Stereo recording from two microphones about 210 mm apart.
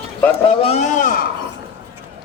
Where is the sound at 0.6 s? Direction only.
30° left (ahead or behind).